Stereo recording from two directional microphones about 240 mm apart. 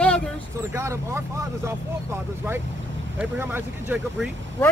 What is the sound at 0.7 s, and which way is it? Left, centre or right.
Speech, centre.